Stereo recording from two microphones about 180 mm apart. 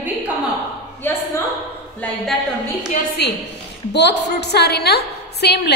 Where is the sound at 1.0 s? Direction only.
10° left (ahead or behind).